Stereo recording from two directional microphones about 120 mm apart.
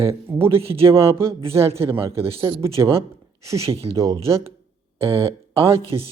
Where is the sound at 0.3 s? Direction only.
20° right (ahead or behind).